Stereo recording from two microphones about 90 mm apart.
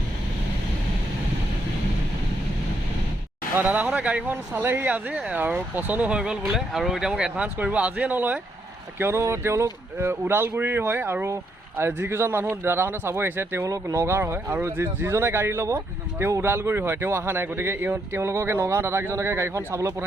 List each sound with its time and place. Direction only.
3.6 s speech: 20° right (ahead or behind)
9.0 s speech: 30° right (ahead or behind)